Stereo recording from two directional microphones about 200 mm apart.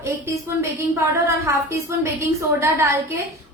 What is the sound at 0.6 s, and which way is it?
Speech, 15° right (ahead or behind).